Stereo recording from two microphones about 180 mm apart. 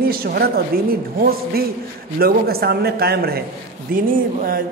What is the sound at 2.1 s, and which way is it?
A man's voice, 60° right (ahead or behind).